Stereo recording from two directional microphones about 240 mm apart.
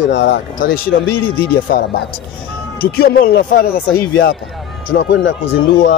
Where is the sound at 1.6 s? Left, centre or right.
Left.